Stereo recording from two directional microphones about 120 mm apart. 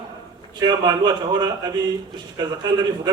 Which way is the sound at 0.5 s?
35° right (ahead or behind).